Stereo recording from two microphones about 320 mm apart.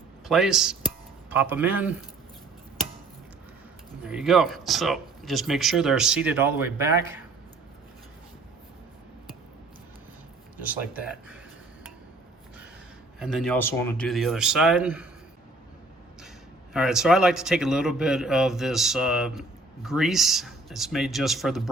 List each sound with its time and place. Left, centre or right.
0.3 s a man's voice: centre
4.0 s a man's voice: centre
13.1 s a man's voice: centre
16.7 s a man's voice: centre